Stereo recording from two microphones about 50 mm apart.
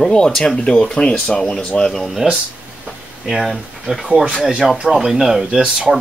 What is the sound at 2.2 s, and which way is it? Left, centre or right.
Speech, centre.